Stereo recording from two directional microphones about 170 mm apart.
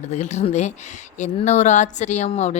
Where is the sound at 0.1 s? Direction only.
45° left (ahead or behind).